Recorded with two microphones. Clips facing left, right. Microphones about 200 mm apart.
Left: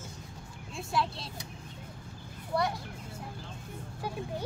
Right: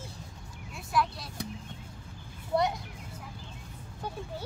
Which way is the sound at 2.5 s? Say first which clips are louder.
Right 3 dB; 20° right (ahead or behind).